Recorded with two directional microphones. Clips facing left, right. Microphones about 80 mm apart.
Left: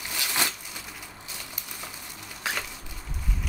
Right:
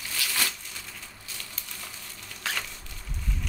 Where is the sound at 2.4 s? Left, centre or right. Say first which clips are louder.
Left 1 dB; centre.